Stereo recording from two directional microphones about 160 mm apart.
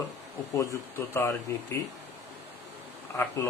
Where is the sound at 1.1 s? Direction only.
15° left (ahead or behind).